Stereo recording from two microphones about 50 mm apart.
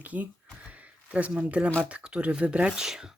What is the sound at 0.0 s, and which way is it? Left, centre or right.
Speech, right.